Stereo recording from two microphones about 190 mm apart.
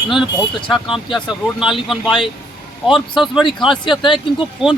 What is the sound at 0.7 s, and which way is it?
Speech, centre (ahead or behind).